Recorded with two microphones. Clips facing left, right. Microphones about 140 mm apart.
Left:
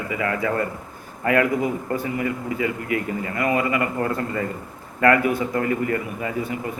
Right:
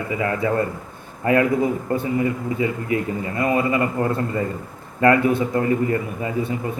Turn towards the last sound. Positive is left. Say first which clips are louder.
# right 2 dB
turn(degrees=-25)  # may be behind; listen again after turning